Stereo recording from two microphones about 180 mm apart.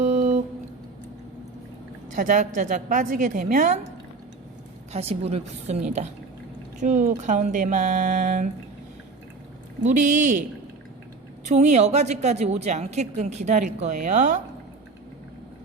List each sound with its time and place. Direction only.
0.0 s a sound: 45° right (ahead or behind)
2.1 s speech: 45° right (ahead or behind)
4.9 s a woman's voice: 35° right (ahead or behind)
9.8 s speech: 45° right (ahead or behind)
11.4 s a woman's voice: 40° right (ahead or behind)